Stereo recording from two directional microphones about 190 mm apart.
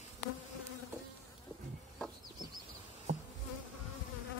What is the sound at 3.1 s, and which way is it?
Insect, 35° right (ahead or behind).